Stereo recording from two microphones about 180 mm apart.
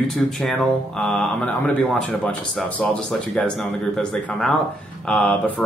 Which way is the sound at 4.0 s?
5° left (ahead or behind).